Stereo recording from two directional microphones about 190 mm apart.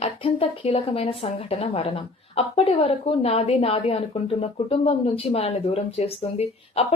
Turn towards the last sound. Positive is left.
turn(degrees=30)  # may be behind; listen again after turning